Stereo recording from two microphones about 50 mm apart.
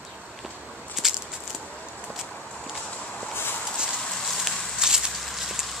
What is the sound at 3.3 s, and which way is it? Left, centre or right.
Walk, left.